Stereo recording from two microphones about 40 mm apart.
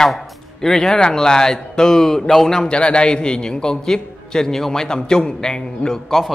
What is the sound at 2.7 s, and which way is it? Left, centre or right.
A man's voice, left.